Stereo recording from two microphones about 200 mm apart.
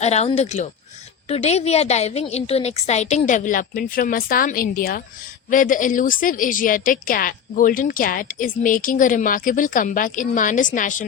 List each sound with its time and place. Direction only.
0.0 s a woman's voice: 30° left (ahead or behind)